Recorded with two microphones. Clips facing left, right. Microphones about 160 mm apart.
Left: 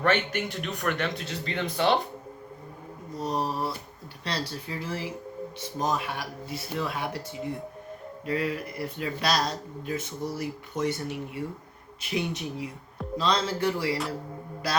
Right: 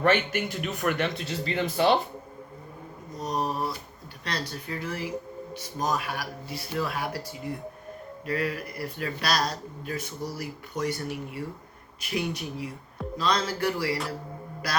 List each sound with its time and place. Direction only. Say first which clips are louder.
0.0 s a man's voice: right 2 dB; 5° right (ahead or behind)
3.2 s speech: even; 30° left (ahead or behind)
8.3 s speech: left 1 dB; 25° left (ahead or behind)